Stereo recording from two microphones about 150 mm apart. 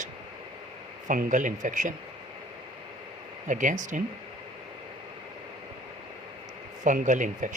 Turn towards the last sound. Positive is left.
turn(degrees=-55)  # may be behind; listen again after turning